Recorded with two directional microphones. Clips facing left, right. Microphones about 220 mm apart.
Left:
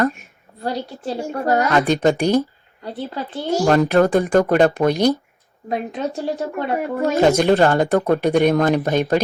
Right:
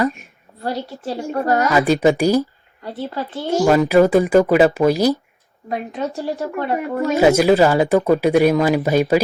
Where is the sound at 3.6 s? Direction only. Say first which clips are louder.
Right 2 dB; 5° right (ahead or behind).